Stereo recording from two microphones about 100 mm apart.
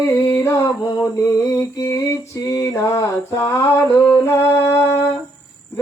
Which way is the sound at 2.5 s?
35° left (ahead or behind).